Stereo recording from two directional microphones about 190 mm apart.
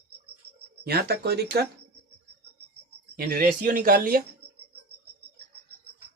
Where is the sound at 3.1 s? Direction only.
50° right (ahead or behind).